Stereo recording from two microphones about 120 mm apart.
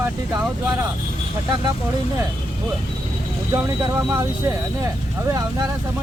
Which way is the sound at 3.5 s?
25° right (ahead or behind).